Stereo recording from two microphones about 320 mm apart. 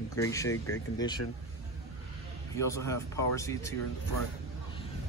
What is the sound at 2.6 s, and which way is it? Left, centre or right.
Speech, centre.